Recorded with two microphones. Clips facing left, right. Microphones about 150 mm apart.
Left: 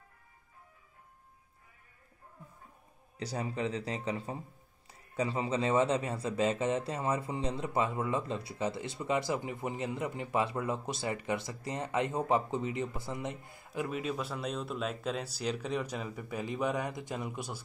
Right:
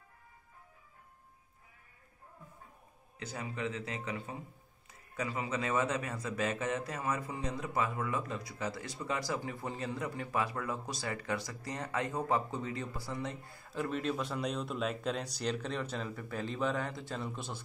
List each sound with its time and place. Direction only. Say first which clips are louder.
3.2 s speech: left 4 dB; 35° left (ahead or behind); by 17.6 s 10° left (ahead or behind)